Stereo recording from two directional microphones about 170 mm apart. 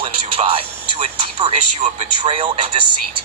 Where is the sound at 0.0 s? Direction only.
35° right (ahead or behind).